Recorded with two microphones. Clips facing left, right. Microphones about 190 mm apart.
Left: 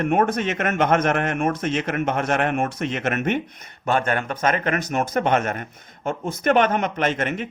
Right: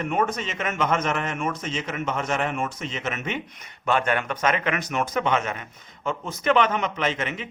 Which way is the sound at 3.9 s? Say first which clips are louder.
Left 1 dB; 45° left (ahead or behind).